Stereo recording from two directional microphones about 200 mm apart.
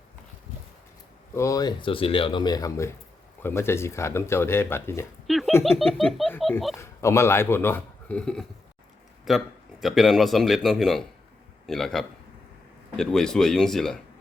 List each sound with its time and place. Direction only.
1.4 s speech: 15° left (ahead or behind)
5.2 s a sound: centre (ahead or behind)
5.9 s speech: centre (ahead or behind)
6.7 s a man's voice: 15° left (ahead or behind)